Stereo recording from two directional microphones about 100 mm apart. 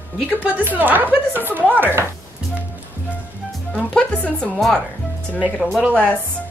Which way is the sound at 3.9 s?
15° left (ahead or behind).